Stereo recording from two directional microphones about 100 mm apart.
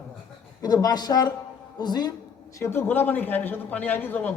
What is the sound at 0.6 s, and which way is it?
Speech, 40° left (ahead or behind).